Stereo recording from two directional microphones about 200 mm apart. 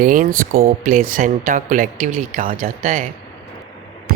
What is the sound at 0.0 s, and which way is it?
Speech, 45° right (ahead or behind).